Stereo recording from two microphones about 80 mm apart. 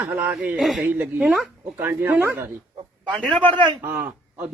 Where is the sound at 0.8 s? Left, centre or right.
Centre.